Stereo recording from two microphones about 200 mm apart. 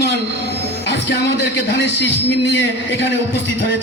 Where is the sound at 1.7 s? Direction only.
60° left (ahead or behind).